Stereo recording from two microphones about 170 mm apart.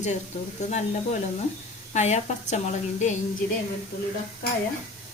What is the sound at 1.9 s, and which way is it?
Speech, 40° left (ahead or behind).